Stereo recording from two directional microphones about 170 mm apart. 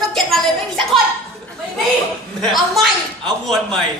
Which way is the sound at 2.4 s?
Centre (ahead or behind).